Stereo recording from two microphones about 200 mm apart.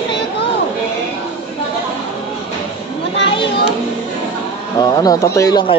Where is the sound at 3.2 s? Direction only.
25° left (ahead or behind).